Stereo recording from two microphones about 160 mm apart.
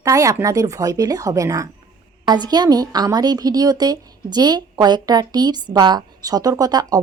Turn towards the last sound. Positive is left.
turn(degrees=-25)  # may be behind; listen again after turning